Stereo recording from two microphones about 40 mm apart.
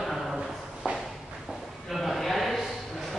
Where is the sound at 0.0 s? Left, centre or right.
Centre.